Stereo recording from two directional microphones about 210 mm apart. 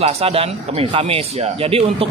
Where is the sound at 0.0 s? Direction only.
30° right (ahead or behind).